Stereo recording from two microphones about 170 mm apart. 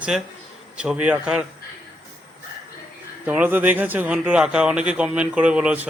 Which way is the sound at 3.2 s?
10° right (ahead or behind).